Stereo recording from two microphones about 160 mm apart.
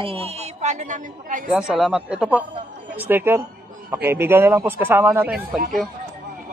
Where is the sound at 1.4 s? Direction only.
5° right (ahead or behind).